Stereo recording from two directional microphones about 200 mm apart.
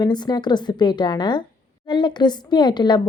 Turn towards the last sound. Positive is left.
turn(degrees=20)  # may be behind; listen again after turning